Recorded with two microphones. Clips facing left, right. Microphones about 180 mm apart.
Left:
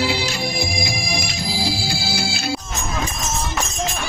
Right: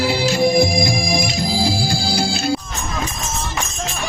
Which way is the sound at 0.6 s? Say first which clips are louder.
Right 9 dB; 50° right (ahead or behind).